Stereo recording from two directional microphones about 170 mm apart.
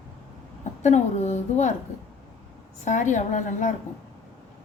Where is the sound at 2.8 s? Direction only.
45° left (ahead or behind).